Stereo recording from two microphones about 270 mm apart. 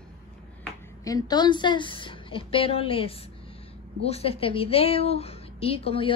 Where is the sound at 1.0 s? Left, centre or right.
Centre.